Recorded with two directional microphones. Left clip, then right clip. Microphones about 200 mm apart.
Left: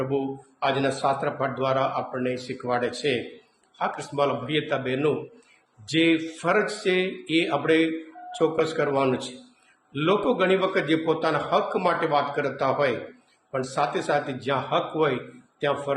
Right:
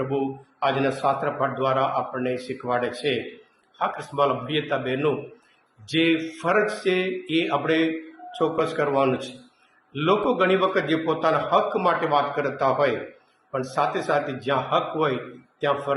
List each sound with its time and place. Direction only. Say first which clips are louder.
0.0 s a man's voice: right 1 dB; 15° left (ahead or behind)